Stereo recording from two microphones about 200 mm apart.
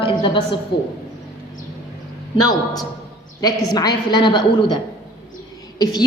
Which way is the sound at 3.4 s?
20° left (ahead or behind).